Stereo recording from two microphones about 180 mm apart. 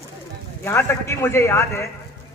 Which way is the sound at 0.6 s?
15° left (ahead or behind).